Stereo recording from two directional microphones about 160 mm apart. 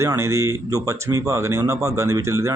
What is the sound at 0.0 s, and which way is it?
Speech, 20° right (ahead or behind).